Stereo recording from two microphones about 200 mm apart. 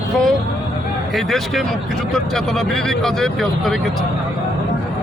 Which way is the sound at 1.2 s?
Centre (ahead or behind).